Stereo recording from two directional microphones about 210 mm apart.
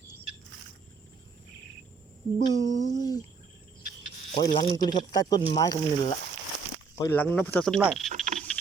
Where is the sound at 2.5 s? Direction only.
20° left (ahead or behind).